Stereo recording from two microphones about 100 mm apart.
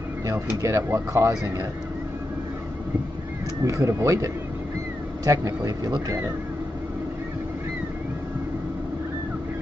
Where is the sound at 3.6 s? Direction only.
35° right (ahead or behind).